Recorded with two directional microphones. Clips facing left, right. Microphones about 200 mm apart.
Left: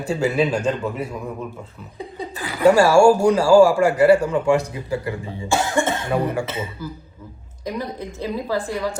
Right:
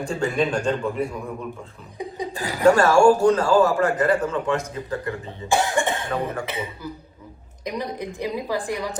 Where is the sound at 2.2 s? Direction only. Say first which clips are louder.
Right 1 dB; 15° right (ahead or behind).